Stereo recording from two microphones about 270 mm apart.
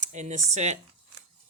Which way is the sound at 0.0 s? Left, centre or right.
Right.